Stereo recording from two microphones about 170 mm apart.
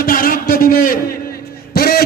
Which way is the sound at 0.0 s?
55° left (ahead or behind).